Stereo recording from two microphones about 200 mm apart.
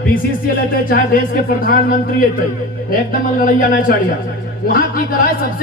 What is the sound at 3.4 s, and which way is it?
Speech, 45° left (ahead or behind).